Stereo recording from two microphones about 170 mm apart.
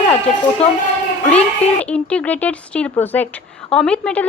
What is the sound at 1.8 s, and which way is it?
Speech, 5° left (ahead or behind).